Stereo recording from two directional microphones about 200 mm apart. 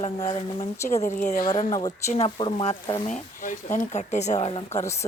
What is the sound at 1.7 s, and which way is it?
Speech, 20° left (ahead or behind).